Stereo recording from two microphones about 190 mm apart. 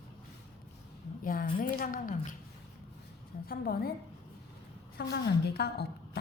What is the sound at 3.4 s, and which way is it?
Speech, 55° left (ahead or behind).